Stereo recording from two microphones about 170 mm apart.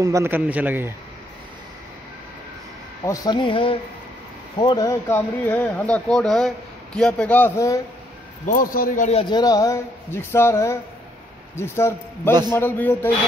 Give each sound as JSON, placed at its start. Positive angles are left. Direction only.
{"t": 0.0, "sound": "a man's voice", "side_deg": -15}
{"t": 3.1, "sound": "speech", "side_deg": 25}
{"t": 8.5, "sound": "a man's voice", "side_deg": 55}
{"t": 9.3, "sound": "speech", "side_deg": 20}